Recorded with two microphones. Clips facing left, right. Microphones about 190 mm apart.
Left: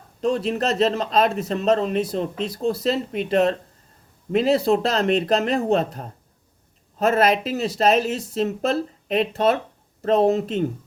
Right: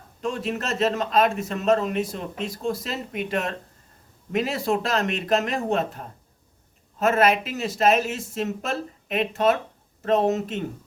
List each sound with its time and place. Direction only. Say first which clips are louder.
0.2 s a man's voice: left 6 dB; 35° left (ahead or behind)